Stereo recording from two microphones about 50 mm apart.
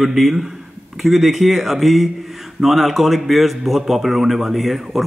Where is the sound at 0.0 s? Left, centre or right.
Centre.